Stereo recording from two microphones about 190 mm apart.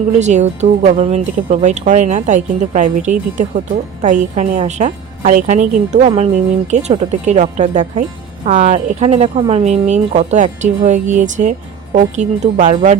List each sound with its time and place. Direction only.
0.2 s a woman's voice: 40° right (ahead or behind)